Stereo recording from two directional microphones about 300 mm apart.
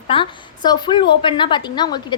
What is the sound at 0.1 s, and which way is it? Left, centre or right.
A woman's voice, centre.